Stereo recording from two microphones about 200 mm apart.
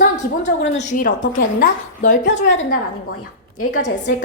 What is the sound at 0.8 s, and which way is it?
Speech, 40° left (ahead or behind).